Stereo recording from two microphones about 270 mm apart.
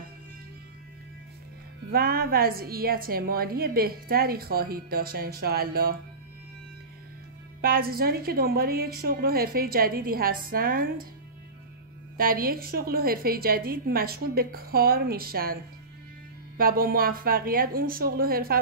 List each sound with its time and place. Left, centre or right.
1.9 s a woman's voice: right
7.6 s a woman's voice: right
12.2 s a woman's voice: right